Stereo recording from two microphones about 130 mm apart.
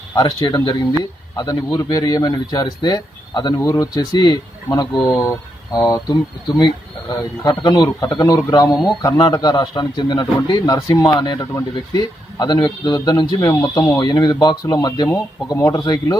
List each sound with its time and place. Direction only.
0.1 s speech: 30° left (ahead or behind)